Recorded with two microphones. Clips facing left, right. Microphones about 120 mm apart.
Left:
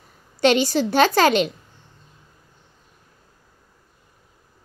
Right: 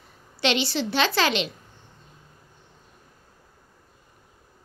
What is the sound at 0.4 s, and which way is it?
A woman's voice, 45° left (ahead or behind).